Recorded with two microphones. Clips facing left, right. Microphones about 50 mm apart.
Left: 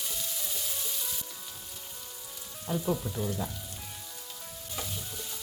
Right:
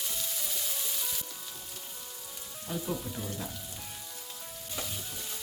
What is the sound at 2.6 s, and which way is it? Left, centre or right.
Rain on surface, centre.